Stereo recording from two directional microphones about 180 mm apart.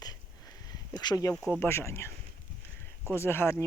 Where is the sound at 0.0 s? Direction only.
20° left (ahead or behind).